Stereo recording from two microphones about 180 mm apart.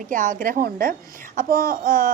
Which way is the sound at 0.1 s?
50° right (ahead or behind).